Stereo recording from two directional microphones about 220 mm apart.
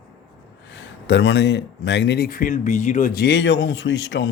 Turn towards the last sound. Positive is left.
turn(degrees=55)  # may be behind; listen again after turning